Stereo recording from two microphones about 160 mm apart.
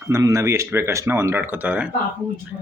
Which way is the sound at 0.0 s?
20° right (ahead or behind).